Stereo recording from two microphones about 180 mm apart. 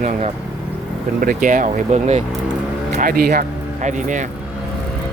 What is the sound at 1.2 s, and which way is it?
Speech, 50° right (ahead or behind).